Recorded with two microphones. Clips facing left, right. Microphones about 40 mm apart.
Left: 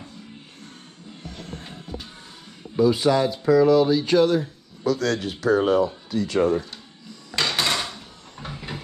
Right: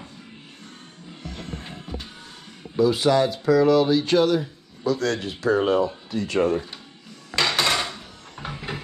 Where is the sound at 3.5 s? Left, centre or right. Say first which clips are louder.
Left 1 dB; right.